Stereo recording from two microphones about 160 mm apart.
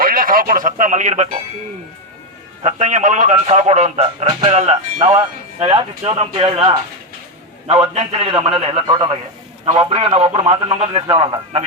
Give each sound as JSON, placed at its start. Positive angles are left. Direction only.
{"t": 0.0, "sound": "speech", "side_deg": -65}
{"t": 2.6, "sound": "a man's voice", "side_deg": -45}